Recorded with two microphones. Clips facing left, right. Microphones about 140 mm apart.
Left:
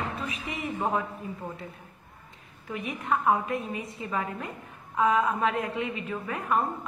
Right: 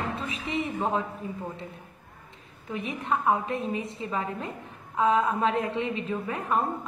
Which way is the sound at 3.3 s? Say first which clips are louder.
Even; 25° right (ahead or behind).